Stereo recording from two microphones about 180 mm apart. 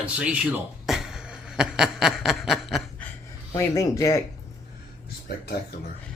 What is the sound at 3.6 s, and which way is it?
Speech, 15° left (ahead or behind).